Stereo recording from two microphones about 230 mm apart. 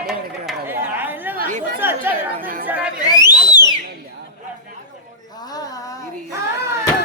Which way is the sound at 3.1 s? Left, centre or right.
Centre.